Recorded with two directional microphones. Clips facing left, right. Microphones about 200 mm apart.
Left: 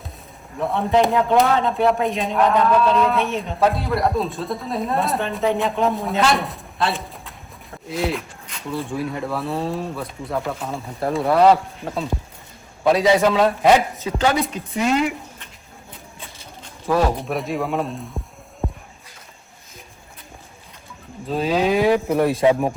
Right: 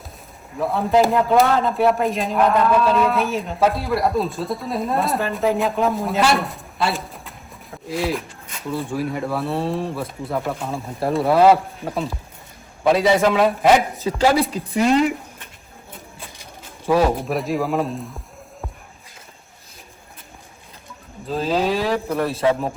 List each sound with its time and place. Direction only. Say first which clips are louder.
0.6 s a man's voice: right 1 dB; centre (ahead or behind)
14.0 s speech: right 3 dB; 30° right (ahead or behind)
16.8 s a man's voice: right 2 dB; centre (ahead or behind)
21.2 s speech: left 1 dB; 5° left (ahead or behind)